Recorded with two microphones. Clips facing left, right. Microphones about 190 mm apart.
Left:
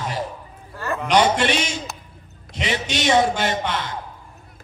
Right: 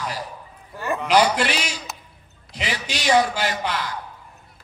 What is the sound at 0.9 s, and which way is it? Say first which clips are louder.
Speech: even; 5° right (ahead or behind).